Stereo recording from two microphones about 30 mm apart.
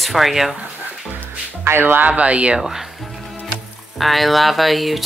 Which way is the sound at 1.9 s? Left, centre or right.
Right.